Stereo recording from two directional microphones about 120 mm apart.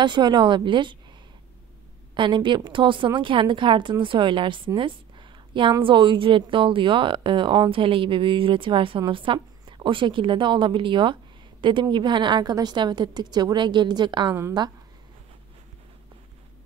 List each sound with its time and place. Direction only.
0.0 s a woman's voice: 40° right (ahead or behind)
2.1 s a woman's voice: 40° right (ahead or behind)